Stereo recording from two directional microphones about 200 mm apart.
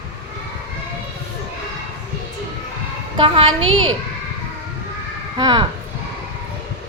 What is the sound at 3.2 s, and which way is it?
Speech, 25° right (ahead or behind).